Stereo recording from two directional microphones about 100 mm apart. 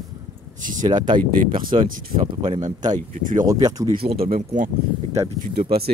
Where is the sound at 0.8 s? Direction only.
50° right (ahead or behind).